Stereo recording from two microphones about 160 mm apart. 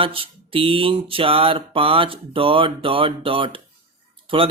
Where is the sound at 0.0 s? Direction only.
35° right (ahead or behind).